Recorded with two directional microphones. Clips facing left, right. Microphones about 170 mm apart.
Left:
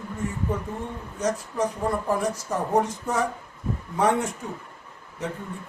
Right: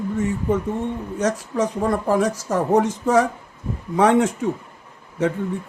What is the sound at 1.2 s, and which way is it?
Speech, 90° right.